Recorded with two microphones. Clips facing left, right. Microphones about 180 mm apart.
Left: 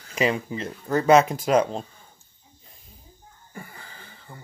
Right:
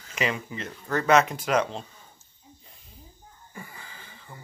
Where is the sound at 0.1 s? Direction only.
30° left (ahead or behind).